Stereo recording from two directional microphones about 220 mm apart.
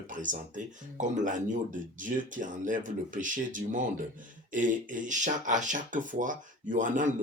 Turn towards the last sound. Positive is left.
turn(degrees=-35)  # may be behind; listen again after turning